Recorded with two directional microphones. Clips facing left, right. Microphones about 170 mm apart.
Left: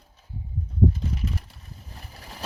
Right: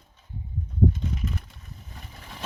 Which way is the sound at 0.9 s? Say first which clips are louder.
Left 1 dB; 35° left (ahead or behind).